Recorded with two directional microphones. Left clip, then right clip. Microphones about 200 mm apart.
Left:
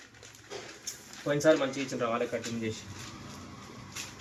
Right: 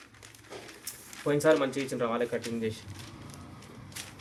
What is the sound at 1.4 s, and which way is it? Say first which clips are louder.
Speech: even; 65° right (ahead or behind).